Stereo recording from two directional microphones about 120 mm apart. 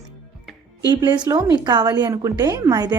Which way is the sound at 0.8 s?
40° right (ahead or behind).